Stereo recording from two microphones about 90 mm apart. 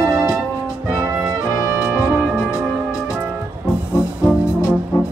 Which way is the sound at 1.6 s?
25° right (ahead or behind).